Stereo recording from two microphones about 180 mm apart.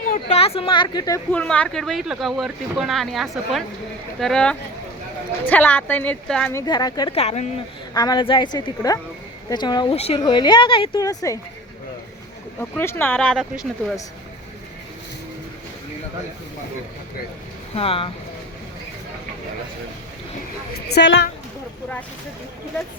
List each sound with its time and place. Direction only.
0.1 s speech: 35° left (ahead or behind); by 1.2 s 20° left (ahead or behind)
1.3 s speech: 5° left (ahead or behind)
6.5 s a woman's voice: 20° left (ahead or behind)
7.1 s speech: 35° left (ahead or behind)
7.9 s a woman's voice: 25° left (ahead or behind)
12.5 s speech: 10° left (ahead or behind)
17.7 s speech: 30° left (ahead or behind)
20.9 s a woman's voice: 75° left (ahead or behind)